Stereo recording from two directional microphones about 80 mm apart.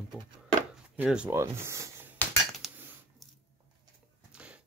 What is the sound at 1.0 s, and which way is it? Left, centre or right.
Speech, centre.